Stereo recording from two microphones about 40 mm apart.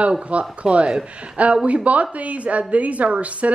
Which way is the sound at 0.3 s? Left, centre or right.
Right.